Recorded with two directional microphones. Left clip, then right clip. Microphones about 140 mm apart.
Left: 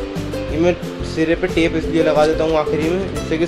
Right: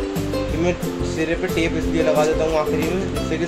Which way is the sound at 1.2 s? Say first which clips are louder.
Left 5 dB; 35° left (ahead or behind).